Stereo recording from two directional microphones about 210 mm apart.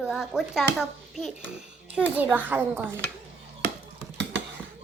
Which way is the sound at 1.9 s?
5° right (ahead or behind).